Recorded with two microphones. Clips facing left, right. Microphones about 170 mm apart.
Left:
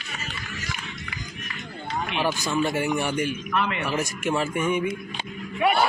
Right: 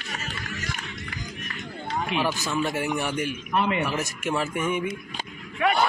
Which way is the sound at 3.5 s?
30° right (ahead or behind).